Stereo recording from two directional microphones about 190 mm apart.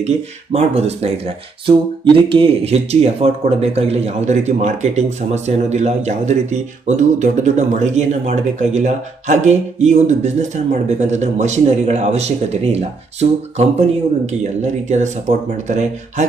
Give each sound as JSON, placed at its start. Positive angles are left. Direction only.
{"t": 0.0, "sound": "speech", "side_deg": -35}